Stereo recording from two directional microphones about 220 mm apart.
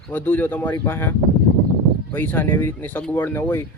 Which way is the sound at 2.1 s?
10° left (ahead or behind).